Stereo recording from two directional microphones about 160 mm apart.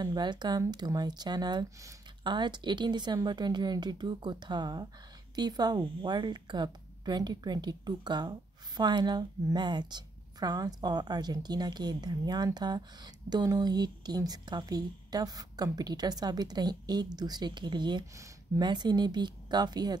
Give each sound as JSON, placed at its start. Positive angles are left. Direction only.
{"t": 0.0, "sound": "a woman's voice", "side_deg": -25}